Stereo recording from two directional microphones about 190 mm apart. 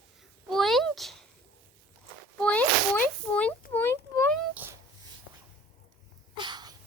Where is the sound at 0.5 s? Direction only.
Centre (ahead or behind).